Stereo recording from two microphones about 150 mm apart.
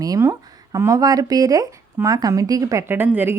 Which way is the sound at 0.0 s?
25° right (ahead or behind).